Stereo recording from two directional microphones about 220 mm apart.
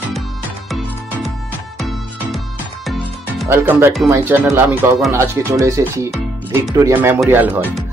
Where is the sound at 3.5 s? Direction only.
10° right (ahead or behind).